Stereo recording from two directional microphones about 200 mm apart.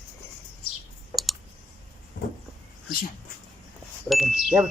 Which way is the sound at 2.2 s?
50° left (ahead or behind).